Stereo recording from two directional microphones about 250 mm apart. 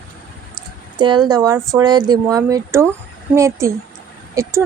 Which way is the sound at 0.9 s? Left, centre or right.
Centre.